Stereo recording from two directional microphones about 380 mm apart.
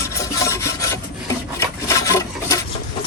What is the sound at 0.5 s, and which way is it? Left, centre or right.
Filing, centre.